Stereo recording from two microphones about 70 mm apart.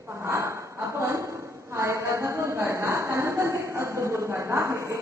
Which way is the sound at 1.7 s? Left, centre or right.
Right.